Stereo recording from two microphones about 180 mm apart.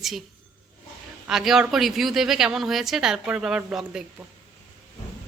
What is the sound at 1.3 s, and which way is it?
Speech, centre (ahead or behind).